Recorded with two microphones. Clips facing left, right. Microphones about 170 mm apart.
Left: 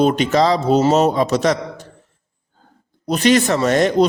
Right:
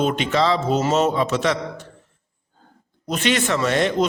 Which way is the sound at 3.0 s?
40° left (ahead or behind).